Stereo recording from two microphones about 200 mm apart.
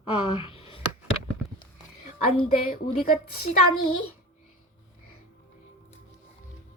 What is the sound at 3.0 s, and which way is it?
Speech, 45° left (ahead or behind).